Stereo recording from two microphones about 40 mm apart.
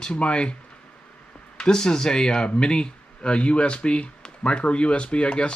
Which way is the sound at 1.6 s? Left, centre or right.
Centre.